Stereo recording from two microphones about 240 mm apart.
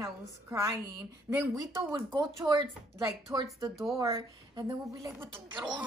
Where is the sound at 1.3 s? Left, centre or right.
Centre.